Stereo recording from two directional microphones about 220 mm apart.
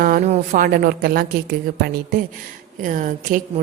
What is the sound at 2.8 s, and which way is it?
Speech, 35° right (ahead or behind).